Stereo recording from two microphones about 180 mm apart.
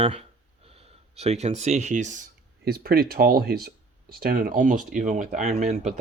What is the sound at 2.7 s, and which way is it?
Speech, 60° right (ahead or behind).